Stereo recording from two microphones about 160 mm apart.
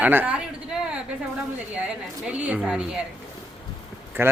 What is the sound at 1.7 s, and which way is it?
Speech, 10° right (ahead or behind).